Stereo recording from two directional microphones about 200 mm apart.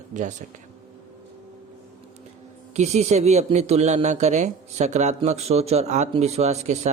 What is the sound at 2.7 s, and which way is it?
Speech, 35° right (ahead or behind).